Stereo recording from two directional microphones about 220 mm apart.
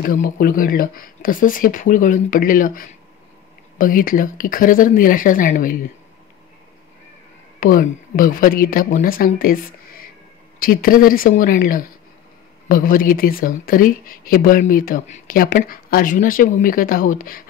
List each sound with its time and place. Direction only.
0.0 s speech: 40° left (ahead or behind)
7.6 s speech: 40° left (ahead or behind)